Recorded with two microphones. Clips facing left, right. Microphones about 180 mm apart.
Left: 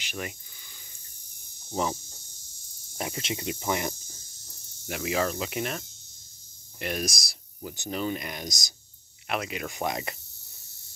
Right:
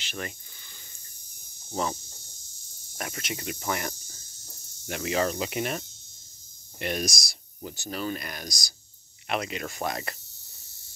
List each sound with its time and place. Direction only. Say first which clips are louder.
0.0 s speech: even; 10° left (ahead or behind)
1.7 s speech: left 1 dB; 10° left (ahead or behind)
3.0 s speech: left 3 dB; 25° left (ahead or behind)
4.8 s cricket: right 1 dB; 5° left (ahead or behind)
6.8 s speech: right 1 dB; 5° left (ahead or behind)
7.7 s speech: left 2 dB; 20° left (ahead or behind)
9.3 s speech: right 1 dB; 5° left (ahead or behind)